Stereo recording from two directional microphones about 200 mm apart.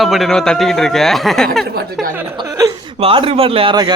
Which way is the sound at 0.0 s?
Centre (ahead or behind).